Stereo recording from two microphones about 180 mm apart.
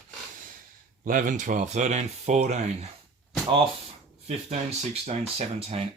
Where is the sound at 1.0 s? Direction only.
50° right (ahead or behind).